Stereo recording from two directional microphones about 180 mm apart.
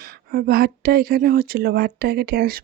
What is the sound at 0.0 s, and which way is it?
Speech, 55° right (ahead or behind).